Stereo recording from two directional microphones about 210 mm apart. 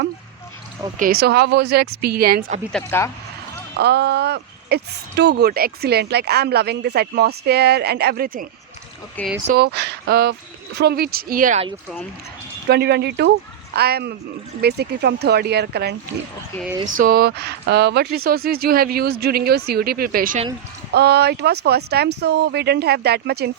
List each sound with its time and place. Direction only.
0.9 s speech: 45° right (ahead or behind)
2.7 s speech: 10° left (ahead or behind)
3.8 s speech: 50° right (ahead or behind)
9.5 s speech: 50° right (ahead or behind)
12.6 s speech: 50° right (ahead or behind)
17.0 s speech: 45° right (ahead or behind)